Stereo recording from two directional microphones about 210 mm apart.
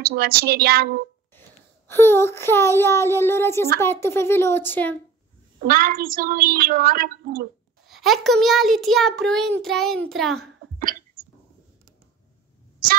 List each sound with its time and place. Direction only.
0.0 s a woman's voice: 45° right (ahead or behind)
1.9 s speech: 10° left (ahead or behind)
5.6 s a woman's voice: 40° right (ahead or behind)
7.9 s a child's voice: centre (ahead or behind)
10.8 s a sound: 40° right (ahead or behind)